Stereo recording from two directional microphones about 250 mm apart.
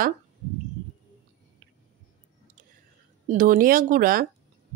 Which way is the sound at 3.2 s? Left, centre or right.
Right.